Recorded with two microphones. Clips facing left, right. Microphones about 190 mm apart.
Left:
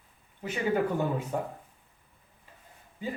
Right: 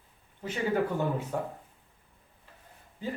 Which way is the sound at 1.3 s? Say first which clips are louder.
Left 1 dB; 15° left (ahead or behind).